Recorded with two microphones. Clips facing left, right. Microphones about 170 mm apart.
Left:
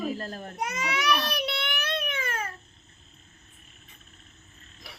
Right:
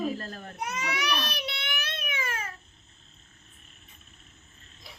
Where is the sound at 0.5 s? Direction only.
65° left (ahead or behind).